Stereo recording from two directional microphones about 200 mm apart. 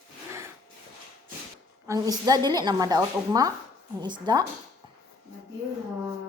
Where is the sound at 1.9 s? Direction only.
20° right (ahead or behind).